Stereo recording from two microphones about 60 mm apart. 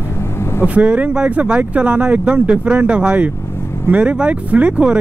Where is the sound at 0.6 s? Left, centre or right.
Right.